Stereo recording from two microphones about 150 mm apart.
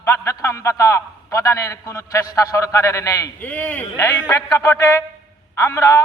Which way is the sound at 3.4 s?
10° left (ahead or behind).